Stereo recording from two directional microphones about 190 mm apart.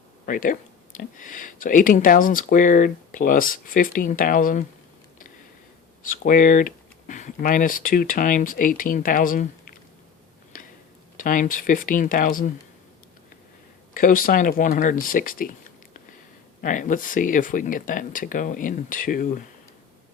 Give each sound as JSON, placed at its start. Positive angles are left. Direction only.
{"t": 0.3, "sound": "speech", "side_deg": 45}
{"t": 6.0, "sound": "speech", "side_deg": 45}
{"t": 10.5, "sound": "a sound", "side_deg": 45}
{"t": 11.2, "sound": "speech", "side_deg": 45}
{"t": 13.9, "sound": "speech", "side_deg": 45}
{"t": 16.6, "sound": "speech", "side_deg": 45}